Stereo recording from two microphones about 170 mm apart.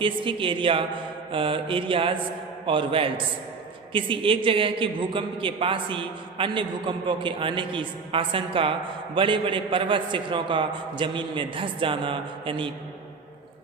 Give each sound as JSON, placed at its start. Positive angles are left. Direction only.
{"t": 0.0, "sound": "a man's voice", "side_deg": -30}